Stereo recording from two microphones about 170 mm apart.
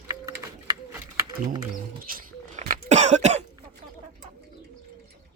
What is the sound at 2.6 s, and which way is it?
Cough, 45° right (ahead or behind).